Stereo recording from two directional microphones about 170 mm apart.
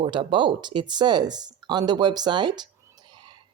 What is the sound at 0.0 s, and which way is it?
Speech, 30° right (ahead or behind).